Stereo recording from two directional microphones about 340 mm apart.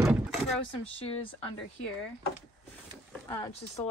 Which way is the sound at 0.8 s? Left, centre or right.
Centre.